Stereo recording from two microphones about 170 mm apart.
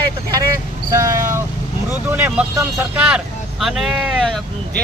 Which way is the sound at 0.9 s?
20° right (ahead or behind).